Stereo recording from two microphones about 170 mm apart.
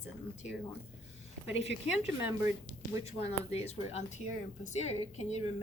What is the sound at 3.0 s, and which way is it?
A woman's voice, 35° left (ahead or behind).